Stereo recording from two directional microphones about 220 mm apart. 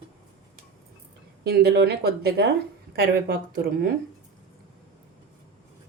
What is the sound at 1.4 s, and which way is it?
Speech, 45° right (ahead or behind).